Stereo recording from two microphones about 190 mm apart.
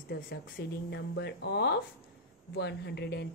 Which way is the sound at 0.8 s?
65° left (ahead or behind).